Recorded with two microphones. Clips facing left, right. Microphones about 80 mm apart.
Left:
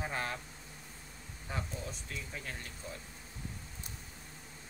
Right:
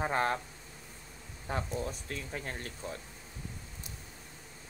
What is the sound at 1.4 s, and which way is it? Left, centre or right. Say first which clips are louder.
A man's voice: right 6 dB; right.